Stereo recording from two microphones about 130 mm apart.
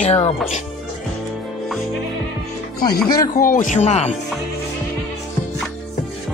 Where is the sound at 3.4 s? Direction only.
90° left.